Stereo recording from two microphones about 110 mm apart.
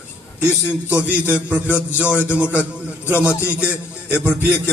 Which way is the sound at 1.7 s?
20° left (ahead or behind).